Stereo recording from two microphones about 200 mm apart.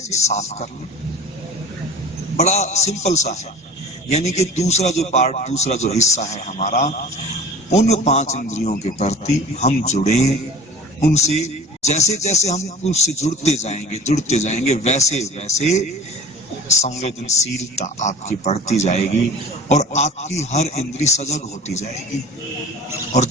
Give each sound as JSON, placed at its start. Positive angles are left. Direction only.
{"t": 0.1, "sound": "speech", "side_deg": 35}
{"t": 2.3, "sound": "speech", "side_deg": 35}